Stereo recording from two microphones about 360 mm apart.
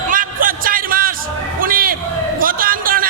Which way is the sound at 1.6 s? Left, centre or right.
Right.